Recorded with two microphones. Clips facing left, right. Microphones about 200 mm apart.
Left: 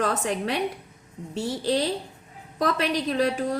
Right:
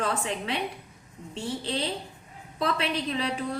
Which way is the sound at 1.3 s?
90° left.